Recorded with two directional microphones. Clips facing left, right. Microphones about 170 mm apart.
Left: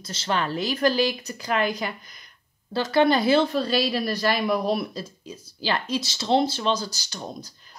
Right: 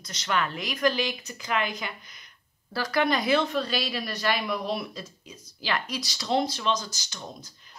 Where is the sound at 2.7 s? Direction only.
25° left (ahead or behind).